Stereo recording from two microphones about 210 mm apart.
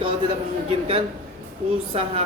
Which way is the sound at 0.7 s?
25° right (ahead or behind).